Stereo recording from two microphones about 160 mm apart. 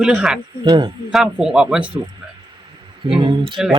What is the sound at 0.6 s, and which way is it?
Speech, 30° right (ahead or behind).